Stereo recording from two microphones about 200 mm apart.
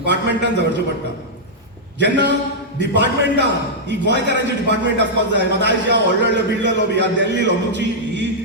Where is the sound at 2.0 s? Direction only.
60° right (ahead or behind).